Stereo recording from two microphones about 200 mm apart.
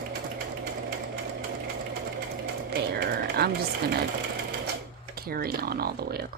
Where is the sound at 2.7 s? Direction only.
55° right (ahead or behind).